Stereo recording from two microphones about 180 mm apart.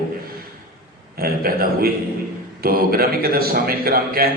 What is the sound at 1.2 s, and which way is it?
A man's voice, 55° right (ahead or behind).